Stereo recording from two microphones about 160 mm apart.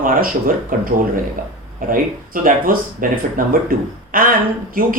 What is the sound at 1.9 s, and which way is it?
Speech, 60° right (ahead or behind).